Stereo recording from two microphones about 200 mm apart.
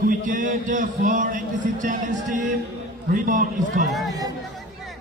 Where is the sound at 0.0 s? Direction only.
40° right (ahead or behind).